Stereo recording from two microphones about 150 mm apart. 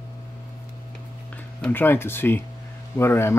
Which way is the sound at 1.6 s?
15° left (ahead or behind).